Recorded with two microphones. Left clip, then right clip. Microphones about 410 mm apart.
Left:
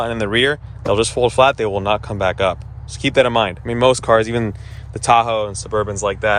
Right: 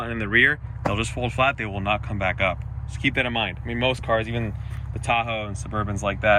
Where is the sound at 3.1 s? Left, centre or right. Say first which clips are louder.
Left 14 dB; left.